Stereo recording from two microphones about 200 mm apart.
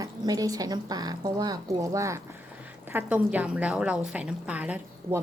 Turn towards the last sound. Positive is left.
turn(degrees=-5)  # may be behind; listen again after turning